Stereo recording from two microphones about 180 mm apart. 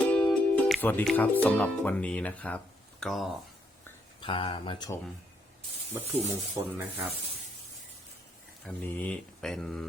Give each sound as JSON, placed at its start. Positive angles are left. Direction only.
{"t": 0.0, "sound": "speech", "side_deg": 5}
{"t": 4.2, "sound": "speech", "side_deg": 30}
{"t": 6.5, "sound": "speech", "side_deg": -10}
{"t": 8.6, "sound": "speech", "side_deg": 10}